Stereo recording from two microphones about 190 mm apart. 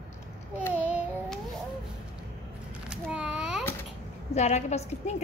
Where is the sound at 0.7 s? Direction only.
5° right (ahead or behind).